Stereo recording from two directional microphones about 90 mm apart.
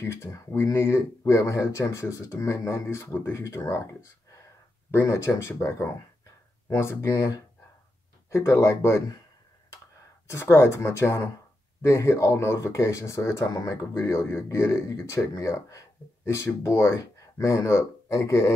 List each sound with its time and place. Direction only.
0.0 s speech: 30° left (ahead or behind)
10.2 s speech: 30° left (ahead or behind)